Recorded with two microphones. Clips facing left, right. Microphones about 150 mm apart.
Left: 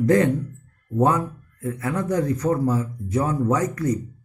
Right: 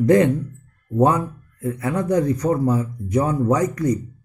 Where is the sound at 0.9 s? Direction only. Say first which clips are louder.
Right 2 dB; 20° right (ahead or behind).